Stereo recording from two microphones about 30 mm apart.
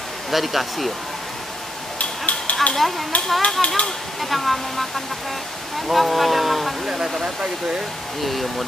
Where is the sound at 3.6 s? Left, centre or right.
Left.